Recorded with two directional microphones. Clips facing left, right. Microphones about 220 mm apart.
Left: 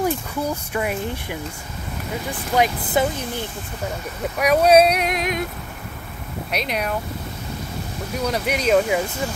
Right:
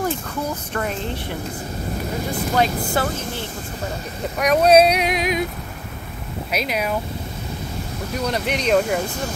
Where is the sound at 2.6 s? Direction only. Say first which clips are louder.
Left 2 dB; 15° left (ahead or behind).